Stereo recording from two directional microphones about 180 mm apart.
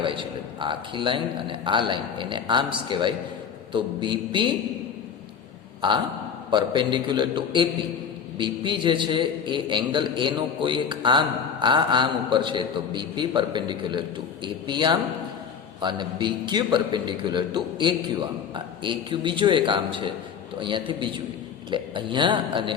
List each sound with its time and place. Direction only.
0.0 s a man's voice: 30° right (ahead or behind)
6.5 s a man's voice: 25° right (ahead or behind)